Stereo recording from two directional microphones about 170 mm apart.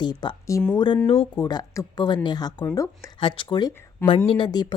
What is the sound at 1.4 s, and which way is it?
A woman's voice, 20° left (ahead or behind).